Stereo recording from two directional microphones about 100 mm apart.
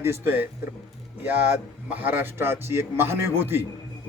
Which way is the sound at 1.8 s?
15° right (ahead or behind).